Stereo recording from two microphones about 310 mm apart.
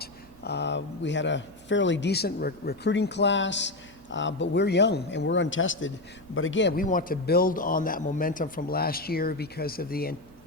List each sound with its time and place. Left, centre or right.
0.0 s a man's voice: left